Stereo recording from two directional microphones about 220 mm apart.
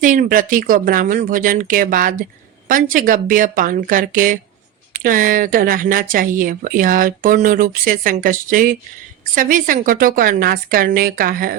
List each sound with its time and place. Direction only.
0.0 s speech: 40° right (ahead or behind)